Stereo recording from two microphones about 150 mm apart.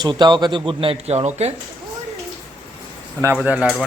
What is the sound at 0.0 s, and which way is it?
A man's voice, 30° right (ahead or behind).